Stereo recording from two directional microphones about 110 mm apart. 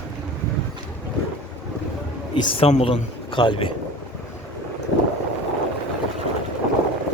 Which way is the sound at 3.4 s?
50° left (ahead or behind).